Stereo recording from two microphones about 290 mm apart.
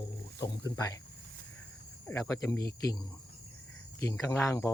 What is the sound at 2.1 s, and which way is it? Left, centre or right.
Speech, centre.